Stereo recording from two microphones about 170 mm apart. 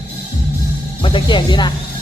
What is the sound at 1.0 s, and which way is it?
Speech, 30° left (ahead or behind).